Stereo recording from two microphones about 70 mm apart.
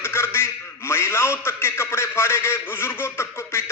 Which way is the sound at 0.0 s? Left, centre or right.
Left.